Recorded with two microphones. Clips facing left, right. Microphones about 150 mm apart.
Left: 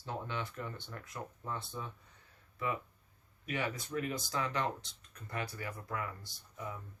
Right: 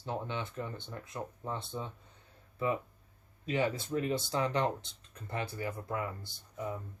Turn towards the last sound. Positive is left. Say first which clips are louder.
# right 6 dB
turn(degrees=-25)  # may be behind; listen again after turning